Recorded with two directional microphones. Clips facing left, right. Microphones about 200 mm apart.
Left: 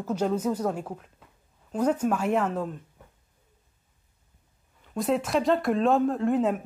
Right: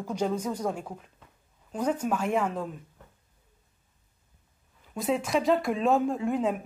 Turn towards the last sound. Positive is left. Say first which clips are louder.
# left 3 dB
turn(degrees=0)  # may be behind; listen again after turning